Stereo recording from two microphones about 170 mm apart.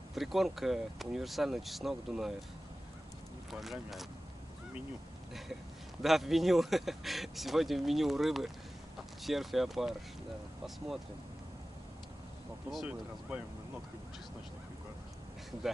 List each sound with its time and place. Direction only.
0.1 s speech: centre (ahead or behind)
3.5 s speech: centre (ahead or behind)
6.0 s speech: centre (ahead or behind)
12.7 s speech: 5° right (ahead or behind)